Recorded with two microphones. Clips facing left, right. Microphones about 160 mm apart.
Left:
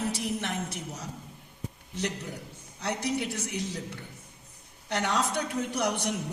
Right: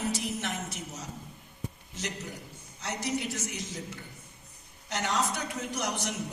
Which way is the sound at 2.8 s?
60° left (ahead or behind).